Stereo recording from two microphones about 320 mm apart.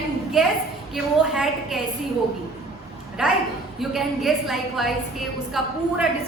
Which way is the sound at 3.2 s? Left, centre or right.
Centre.